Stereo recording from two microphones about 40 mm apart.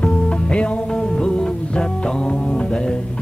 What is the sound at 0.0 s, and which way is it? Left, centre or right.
Music, left.